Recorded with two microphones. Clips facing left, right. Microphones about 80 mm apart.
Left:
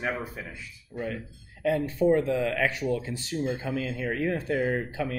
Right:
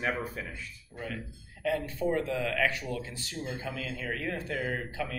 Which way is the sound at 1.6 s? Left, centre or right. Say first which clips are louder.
Left 6 dB; left.